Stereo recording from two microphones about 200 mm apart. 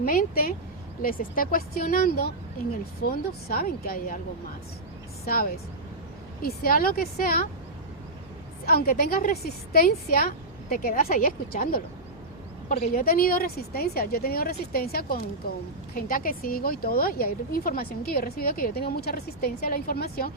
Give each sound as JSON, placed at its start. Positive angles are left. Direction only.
{"t": 0.0, "sound": "a woman's voice", "side_deg": 45}
{"t": 5.2, "sound": "a woman's voice", "side_deg": 50}
{"t": 8.6, "sound": "a woman's voice", "side_deg": 50}